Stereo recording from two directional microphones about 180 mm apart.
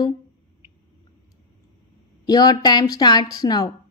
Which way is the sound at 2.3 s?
20° left (ahead or behind).